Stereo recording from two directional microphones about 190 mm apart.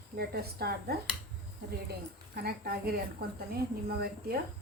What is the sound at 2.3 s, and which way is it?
A woman's voice, 50° right (ahead or behind).